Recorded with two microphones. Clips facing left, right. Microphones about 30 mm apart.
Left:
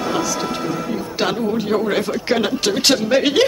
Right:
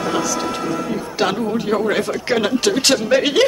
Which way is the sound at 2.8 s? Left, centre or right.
Left.